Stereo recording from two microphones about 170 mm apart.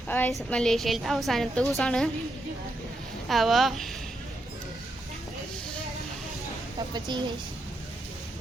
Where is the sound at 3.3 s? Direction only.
Centre (ahead or behind).